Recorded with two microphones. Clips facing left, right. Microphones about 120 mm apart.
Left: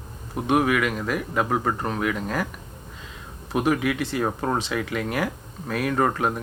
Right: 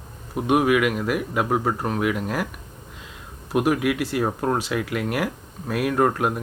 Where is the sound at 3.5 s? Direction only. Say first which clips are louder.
Right 2 dB; 5° right (ahead or behind).